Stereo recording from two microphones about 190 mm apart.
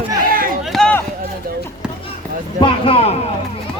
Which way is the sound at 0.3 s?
50° right (ahead or behind).